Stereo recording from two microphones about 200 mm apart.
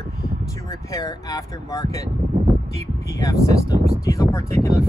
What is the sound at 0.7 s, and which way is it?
Speech, 15° left (ahead or behind).